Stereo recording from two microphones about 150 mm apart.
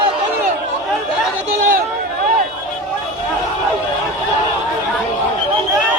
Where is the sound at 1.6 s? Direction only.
65° right (ahead or behind).